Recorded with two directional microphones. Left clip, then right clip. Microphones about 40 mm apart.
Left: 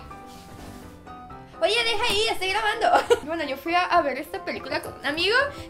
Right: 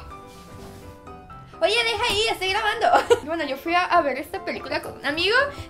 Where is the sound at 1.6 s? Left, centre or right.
Right.